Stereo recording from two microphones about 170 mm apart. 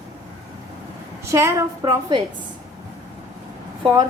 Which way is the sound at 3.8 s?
25° right (ahead or behind).